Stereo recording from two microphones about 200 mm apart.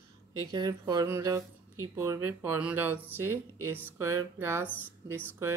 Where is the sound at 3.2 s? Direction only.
90° right.